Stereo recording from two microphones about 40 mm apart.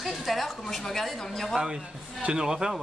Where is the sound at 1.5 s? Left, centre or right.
Centre.